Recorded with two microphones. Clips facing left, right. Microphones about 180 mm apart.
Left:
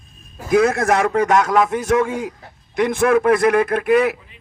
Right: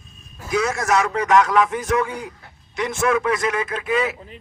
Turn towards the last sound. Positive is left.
turn(degrees=60)  # may be behind; listen again after turning